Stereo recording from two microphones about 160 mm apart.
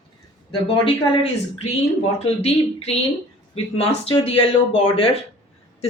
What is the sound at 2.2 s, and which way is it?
Speech, 40° left (ahead or behind).